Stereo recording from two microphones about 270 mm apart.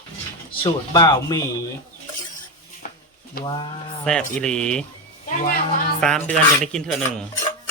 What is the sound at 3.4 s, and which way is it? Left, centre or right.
Cutlery, centre.